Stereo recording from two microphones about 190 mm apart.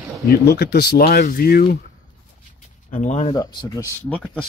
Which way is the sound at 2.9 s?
40° left (ahead or behind).